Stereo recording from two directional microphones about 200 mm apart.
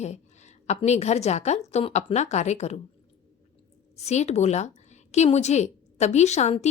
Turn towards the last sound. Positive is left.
turn(degrees=35)  # may be behind; listen again after turning